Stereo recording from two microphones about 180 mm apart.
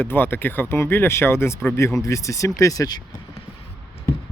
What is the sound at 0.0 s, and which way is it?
Speech, 10° left (ahead or behind).